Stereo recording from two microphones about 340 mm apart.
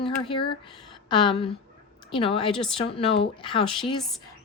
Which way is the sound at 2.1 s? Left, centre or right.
Centre.